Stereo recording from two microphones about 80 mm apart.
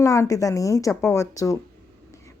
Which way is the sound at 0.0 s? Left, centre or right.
Left.